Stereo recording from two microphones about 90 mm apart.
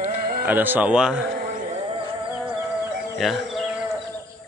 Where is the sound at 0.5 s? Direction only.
20° right (ahead or behind).